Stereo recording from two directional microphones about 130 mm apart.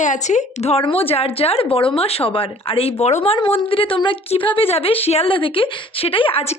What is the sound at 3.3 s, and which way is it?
A woman's voice, 40° left (ahead or behind).